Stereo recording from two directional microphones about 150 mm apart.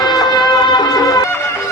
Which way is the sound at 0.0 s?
25° left (ahead or behind).